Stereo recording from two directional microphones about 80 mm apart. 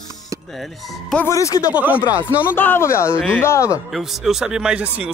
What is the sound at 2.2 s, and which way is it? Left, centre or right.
Speech, left.